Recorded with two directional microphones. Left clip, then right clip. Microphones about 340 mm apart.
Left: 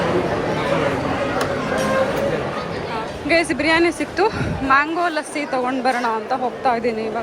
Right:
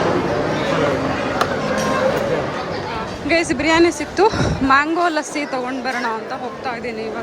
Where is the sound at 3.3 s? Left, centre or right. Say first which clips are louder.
Even; centre.